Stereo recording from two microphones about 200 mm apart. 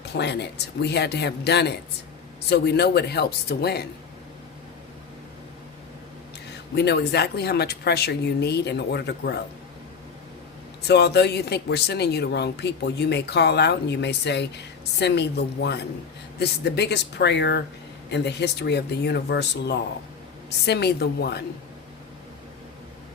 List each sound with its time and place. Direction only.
0.0 s speech: 60° left (ahead or behind)
6.7 s speech: 55° left (ahead or behind)
10.8 s speech: 55° left (ahead or behind)